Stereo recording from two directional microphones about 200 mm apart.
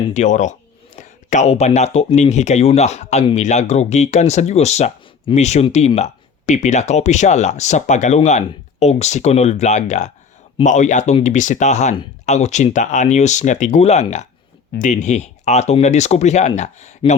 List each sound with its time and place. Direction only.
0.1 s speech: 35° left (ahead or behind)